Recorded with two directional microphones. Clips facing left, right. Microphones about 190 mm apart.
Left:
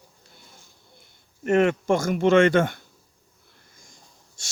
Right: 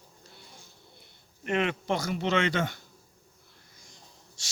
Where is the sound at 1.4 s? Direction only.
45° left (ahead or behind).